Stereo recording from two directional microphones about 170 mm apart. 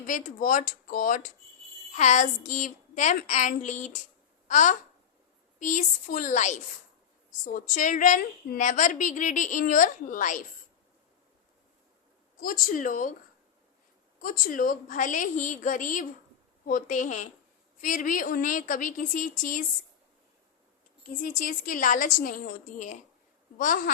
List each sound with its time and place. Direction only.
0.1 s a woman's voice: 50° left (ahead or behind)
12.4 s a woman's voice: 55° left (ahead or behind)
14.2 s a woman's voice: 55° left (ahead or behind)
21.2 s a woman's voice: 55° left (ahead or behind)